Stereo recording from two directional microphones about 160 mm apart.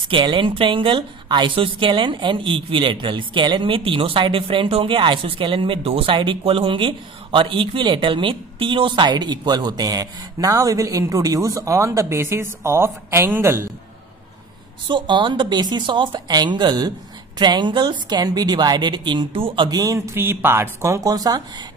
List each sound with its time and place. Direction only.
0.1 s a woman's voice: 30° right (ahead or behind)
14.9 s a woman's voice: 30° right (ahead or behind)